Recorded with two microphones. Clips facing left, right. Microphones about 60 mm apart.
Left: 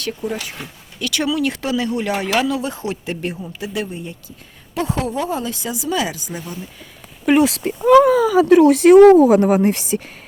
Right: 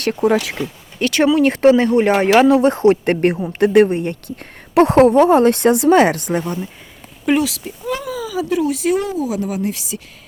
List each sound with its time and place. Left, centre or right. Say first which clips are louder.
0.0 s speech: right 9 dB; right
0.9 s speech: right 6 dB; right
7.3 s speech: left 2 dB; centre
7.6 s speech: left 13 dB; left
9.2 s speech: left 8 dB; left